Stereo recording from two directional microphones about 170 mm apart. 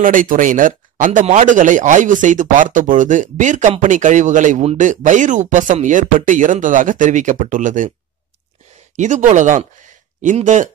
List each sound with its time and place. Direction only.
0.0 s speech: 50° right (ahead or behind)
8.9 s speech: 45° right (ahead or behind)